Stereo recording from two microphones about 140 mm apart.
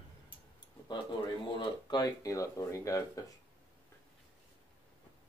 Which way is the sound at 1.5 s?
35° left (ahead or behind).